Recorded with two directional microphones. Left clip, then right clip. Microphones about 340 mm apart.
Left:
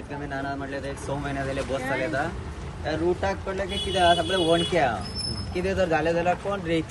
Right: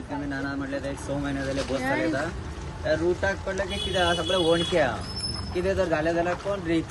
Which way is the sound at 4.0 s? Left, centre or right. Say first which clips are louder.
Left 3 dB; centre.